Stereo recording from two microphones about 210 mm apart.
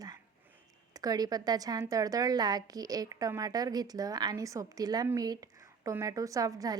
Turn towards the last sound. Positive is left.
turn(degrees=-15)  # may be behind; listen again after turning